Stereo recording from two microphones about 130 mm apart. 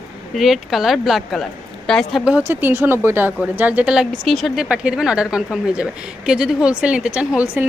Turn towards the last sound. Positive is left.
turn(degrees=-15)  # may be behind; listen again after turning